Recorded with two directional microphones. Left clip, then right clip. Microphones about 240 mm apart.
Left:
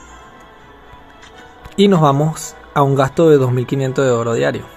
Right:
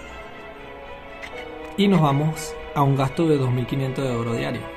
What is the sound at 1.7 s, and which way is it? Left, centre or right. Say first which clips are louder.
Speech: left 8 dB; left.